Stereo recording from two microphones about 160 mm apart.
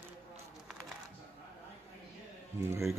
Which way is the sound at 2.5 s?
15° right (ahead or behind).